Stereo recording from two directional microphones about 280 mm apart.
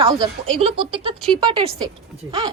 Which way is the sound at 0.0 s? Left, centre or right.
Centre.